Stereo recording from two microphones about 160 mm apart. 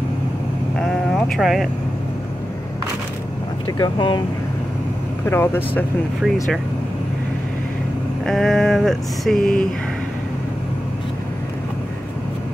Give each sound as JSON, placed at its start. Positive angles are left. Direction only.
{"t": 0.7, "sound": "vehicle", "side_deg": 5}
{"t": 3.6, "sound": "speech", "side_deg": 25}
{"t": 5.2, "sound": "speech", "side_deg": 15}
{"t": 8.3, "sound": "a sound", "side_deg": 0}